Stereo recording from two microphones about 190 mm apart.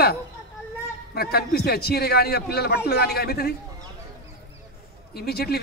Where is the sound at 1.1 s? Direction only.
55° left (ahead or behind).